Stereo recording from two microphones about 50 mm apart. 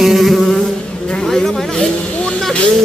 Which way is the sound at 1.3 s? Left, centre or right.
Centre.